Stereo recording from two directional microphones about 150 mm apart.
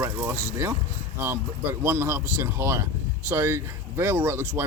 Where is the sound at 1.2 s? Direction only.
15° right (ahead or behind).